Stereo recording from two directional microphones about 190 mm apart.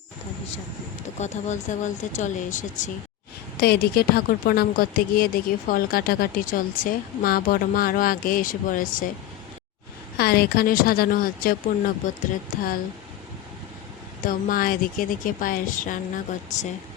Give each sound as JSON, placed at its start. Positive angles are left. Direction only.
{"t": 1.2, "sound": "speech", "side_deg": 40}
{"t": 3.6, "sound": "a woman's voice", "side_deg": 55}
{"t": 10.2, "sound": "a woman's voice", "side_deg": 55}
{"t": 14.2, "sound": "a woman's voice", "side_deg": 45}